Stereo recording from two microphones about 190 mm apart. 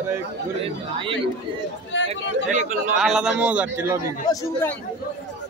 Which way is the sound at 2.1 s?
40° right (ahead or behind).